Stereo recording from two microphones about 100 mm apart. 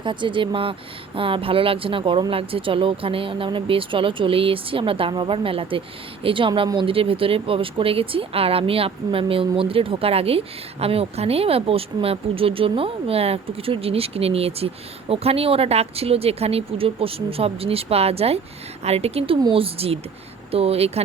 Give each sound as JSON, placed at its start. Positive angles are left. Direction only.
{"t": 0.0, "sound": "speech", "side_deg": -55}